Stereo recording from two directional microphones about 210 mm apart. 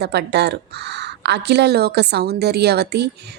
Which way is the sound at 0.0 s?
50° right (ahead or behind).